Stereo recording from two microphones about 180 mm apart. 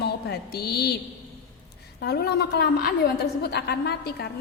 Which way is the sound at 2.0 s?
65° left (ahead or behind).